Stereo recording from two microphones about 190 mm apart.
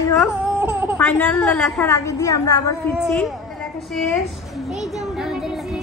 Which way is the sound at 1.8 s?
15° left (ahead or behind).